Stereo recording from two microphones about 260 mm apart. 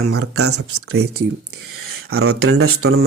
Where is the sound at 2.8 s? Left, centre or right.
Right.